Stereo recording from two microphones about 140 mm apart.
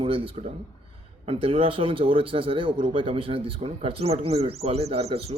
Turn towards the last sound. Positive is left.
turn(degrees=-45)  # may be behind; listen again after turning